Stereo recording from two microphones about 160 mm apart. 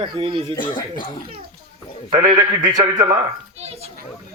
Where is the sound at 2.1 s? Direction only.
20° right (ahead or behind).